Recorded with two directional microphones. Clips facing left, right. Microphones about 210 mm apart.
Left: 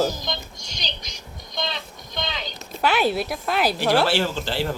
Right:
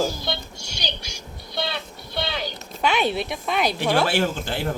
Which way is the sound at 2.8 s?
5° left (ahead or behind).